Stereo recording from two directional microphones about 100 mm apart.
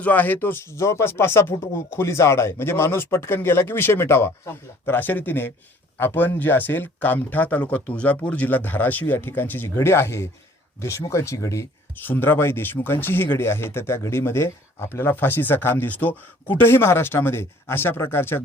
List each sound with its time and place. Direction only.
0.0 s speech: 15° left (ahead or behind)